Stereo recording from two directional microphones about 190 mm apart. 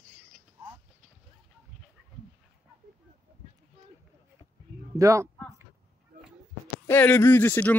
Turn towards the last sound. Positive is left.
turn(degrees=10)  # may be behind; listen again after turning